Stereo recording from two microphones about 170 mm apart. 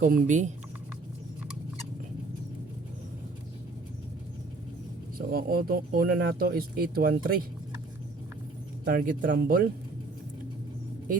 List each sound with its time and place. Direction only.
0.0 s speech: 55° right (ahead or behind)
5.1 s speech: 60° right (ahead or behind)
8.9 s speech: 55° right (ahead or behind)